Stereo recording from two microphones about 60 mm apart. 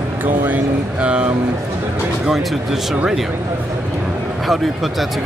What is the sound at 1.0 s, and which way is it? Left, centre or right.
Speech, centre.